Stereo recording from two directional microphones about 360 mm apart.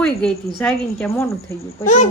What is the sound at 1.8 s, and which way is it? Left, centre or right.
Speech, centre.